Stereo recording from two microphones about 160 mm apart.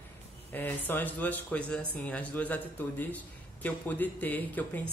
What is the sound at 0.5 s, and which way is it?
Speech, 10° left (ahead or behind).